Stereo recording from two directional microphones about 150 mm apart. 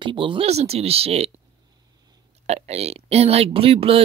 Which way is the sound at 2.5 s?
45° right (ahead or behind).